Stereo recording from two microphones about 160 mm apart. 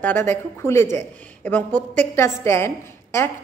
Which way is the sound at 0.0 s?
15° left (ahead or behind).